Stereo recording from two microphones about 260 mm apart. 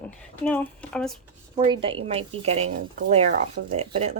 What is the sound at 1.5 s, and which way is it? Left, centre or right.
Speech, centre.